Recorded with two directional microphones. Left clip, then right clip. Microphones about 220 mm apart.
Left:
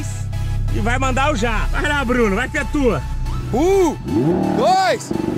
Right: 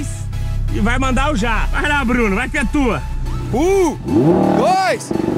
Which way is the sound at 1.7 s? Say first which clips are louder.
Right 2 dB; 75° right (ahead or behind).